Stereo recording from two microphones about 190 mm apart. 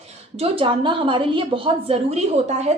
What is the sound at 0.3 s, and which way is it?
A woman's voice, 30° right (ahead or behind).